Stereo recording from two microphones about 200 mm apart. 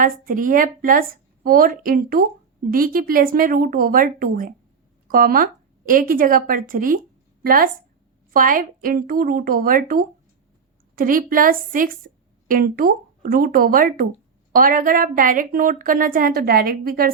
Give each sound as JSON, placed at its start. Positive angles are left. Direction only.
{"t": 0.0, "sound": "a woman's voice", "side_deg": -45}